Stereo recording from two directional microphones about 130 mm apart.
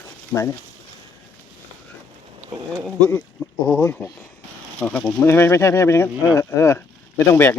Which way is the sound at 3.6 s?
25° left (ahead or behind).